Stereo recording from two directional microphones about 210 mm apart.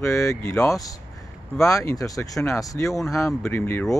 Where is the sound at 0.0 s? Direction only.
15° left (ahead or behind).